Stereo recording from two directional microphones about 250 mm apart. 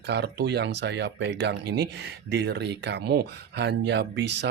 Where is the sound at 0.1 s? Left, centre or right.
Right.